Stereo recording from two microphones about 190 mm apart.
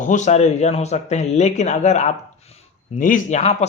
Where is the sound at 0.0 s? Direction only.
40° left (ahead or behind).